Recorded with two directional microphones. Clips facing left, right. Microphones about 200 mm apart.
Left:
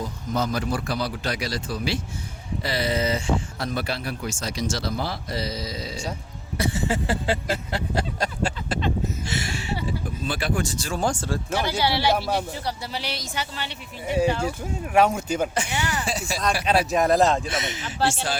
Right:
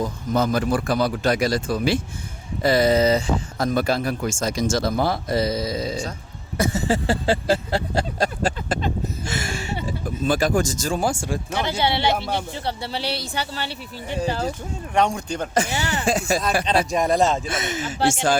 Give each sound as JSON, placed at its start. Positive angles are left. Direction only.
{"t": 0.0, "sound": "speech", "side_deg": -50}
{"t": 6.6, "sound": "a sound", "side_deg": -40}
{"t": 8.7, "sound": "a sound", "side_deg": -50}
{"t": 9.8, "sound": "speech", "side_deg": -45}
{"t": 11.0, "sound": "a man's voice", "side_deg": -10}
{"t": 12.1, "sound": "speech", "side_deg": 0}
{"t": 12.5, "sound": "a sound", "side_deg": -30}
{"t": 14.9, "sound": "speech", "side_deg": 5}
{"t": 15.5, "sound": "speech", "side_deg": -40}
{"t": 16.0, "sound": "speech", "side_deg": -50}
{"t": 16.6, "sound": "speech", "side_deg": 5}
{"t": 17.5, "sound": "speech", "side_deg": -50}